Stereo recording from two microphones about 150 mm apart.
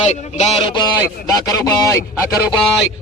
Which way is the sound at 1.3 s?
20° left (ahead or behind).